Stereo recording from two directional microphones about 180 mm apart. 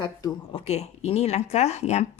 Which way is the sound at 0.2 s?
30° left (ahead or behind).